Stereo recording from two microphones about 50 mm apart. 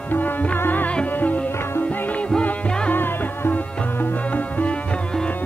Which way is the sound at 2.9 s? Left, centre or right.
Left.